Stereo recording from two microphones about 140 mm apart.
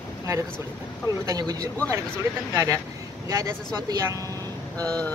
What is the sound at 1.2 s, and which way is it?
Speech, 25° right (ahead or behind).